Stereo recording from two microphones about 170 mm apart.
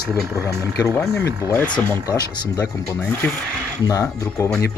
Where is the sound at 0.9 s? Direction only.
15° left (ahead or behind).